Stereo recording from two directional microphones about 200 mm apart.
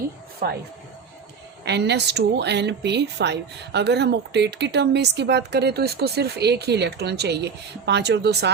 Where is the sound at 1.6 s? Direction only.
55° right (ahead or behind).